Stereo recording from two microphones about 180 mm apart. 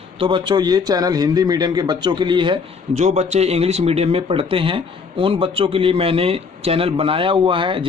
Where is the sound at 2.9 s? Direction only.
40° right (ahead or behind).